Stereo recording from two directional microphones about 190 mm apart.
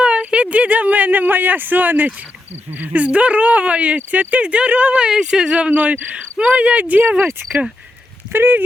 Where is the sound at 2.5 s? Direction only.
35° right (ahead or behind).